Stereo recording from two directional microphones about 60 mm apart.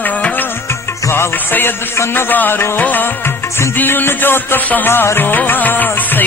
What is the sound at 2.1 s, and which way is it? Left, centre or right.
Music, left.